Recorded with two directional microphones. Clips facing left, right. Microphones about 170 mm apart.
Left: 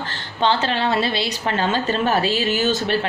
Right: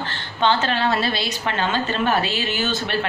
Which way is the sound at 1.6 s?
35° left (ahead or behind).